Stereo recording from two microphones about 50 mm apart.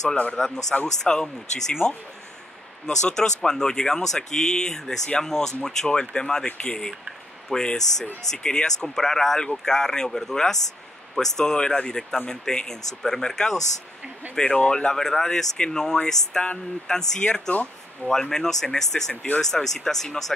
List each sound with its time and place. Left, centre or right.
0.1 s speech: left
1.0 s speech: centre
2.9 s speech: centre
17.2 s speech: left
18.0 s speech: centre